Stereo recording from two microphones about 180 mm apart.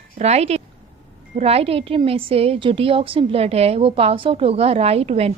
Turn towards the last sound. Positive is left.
turn(degrees=-35)  # may be behind; listen again after turning